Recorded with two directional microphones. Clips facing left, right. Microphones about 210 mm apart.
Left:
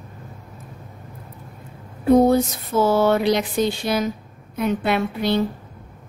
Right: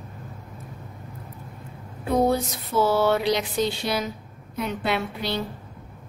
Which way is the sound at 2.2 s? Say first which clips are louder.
Left 5 dB; 50° left (ahead or behind).